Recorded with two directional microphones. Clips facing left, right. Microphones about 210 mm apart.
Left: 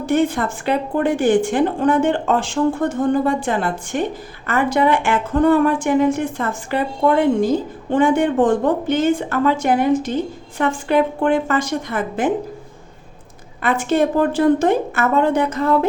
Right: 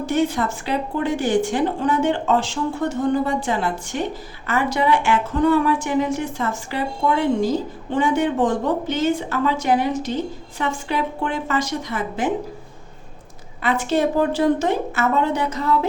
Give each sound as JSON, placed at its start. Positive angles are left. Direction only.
{"t": 0.0, "sound": "a woman's voice", "side_deg": 55}
{"t": 13.6, "sound": "a woman's voice", "side_deg": 50}